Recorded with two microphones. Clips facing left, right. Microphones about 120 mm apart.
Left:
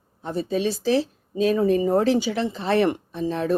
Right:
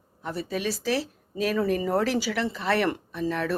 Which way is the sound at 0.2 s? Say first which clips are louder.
Left 6 dB; 25° left (ahead or behind).